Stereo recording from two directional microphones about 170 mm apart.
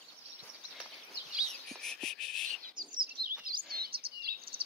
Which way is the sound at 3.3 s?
60° right (ahead or behind).